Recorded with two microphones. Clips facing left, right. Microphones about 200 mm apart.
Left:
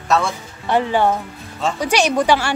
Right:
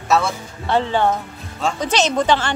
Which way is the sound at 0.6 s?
15° left (ahead or behind).